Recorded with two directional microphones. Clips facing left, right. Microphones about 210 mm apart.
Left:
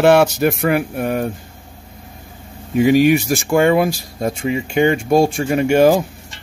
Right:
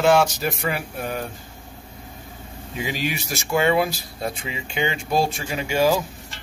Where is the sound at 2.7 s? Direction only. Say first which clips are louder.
Left 15 dB; 55° left (ahead or behind).